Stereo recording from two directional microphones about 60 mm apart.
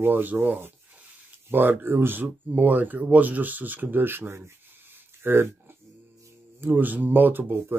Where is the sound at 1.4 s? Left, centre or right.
Right.